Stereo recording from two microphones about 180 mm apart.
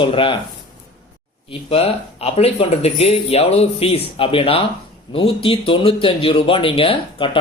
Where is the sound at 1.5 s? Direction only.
35° left (ahead or behind).